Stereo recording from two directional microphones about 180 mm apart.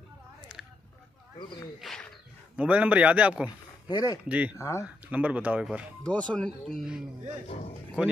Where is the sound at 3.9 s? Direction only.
20° left (ahead or behind).